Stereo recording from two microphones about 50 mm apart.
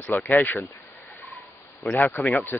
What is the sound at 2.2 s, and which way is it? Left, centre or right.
Speech, left.